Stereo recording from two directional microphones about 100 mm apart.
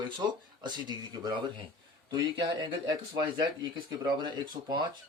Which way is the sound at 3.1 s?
50° right (ahead or behind).